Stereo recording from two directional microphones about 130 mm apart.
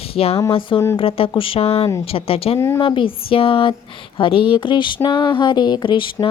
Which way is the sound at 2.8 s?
40° left (ahead or behind).